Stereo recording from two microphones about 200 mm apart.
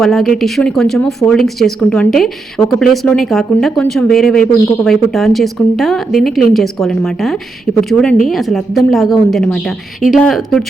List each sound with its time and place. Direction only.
0.0 s speech: centre (ahead or behind)